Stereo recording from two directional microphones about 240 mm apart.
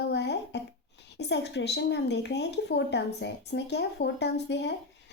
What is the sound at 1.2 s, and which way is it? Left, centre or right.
A woman's voice, left.